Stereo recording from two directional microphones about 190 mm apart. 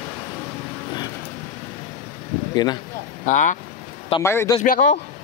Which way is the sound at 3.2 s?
40° left (ahead or behind).